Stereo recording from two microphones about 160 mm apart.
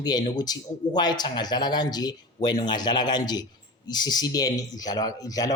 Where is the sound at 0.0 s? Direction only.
25° left (ahead or behind).